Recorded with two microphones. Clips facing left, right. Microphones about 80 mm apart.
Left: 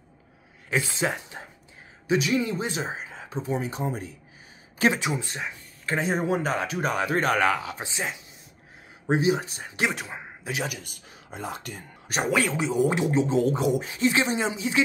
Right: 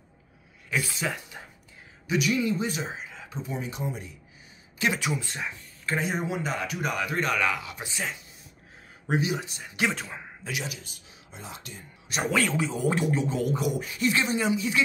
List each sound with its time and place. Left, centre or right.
0.7 s speech: left
5.0 s speech: left
9.8 s speech: centre
10.6 s speech: left
12.2 s speech: centre